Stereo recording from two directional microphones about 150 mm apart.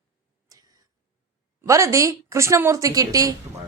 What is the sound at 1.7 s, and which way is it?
Speech, 20° right (ahead or behind).